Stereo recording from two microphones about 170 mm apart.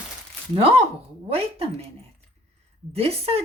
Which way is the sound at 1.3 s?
35° right (ahead or behind).